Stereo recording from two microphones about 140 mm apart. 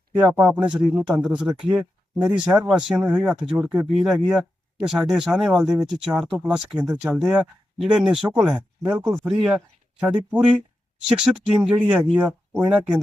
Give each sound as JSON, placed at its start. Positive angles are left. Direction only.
{"t": 0.4, "sound": "a man's voice", "side_deg": -10}